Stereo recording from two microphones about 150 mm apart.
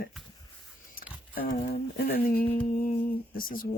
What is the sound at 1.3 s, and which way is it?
Speech, 70° left (ahead or behind).